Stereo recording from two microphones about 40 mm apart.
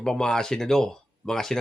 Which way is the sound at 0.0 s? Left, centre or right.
Centre.